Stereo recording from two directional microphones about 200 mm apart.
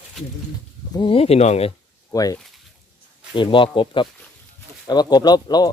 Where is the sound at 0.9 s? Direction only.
25° left (ahead or behind).